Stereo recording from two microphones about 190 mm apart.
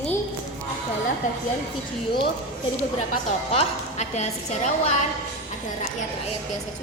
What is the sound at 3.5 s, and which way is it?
A woman's voice, 35° left (ahead or behind).